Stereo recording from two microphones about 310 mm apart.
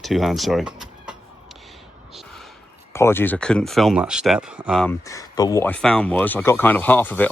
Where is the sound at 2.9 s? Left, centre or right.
Centre.